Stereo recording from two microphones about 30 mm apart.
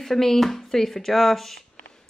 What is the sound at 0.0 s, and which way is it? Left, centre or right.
Speech, centre.